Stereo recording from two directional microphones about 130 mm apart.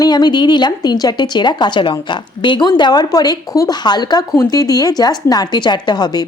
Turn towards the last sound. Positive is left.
turn(degrees=30)  # may be behind; listen again after turning